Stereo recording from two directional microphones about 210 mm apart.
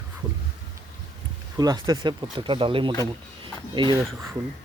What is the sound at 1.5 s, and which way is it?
Speech, 15° right (ahead or behind).